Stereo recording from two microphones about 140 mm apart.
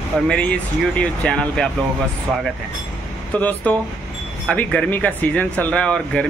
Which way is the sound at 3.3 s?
10° left (ahead or behind).